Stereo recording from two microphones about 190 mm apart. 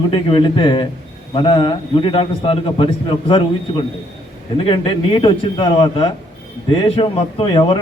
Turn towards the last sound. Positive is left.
turn(degrees=25)  # may be behind; listen again after turning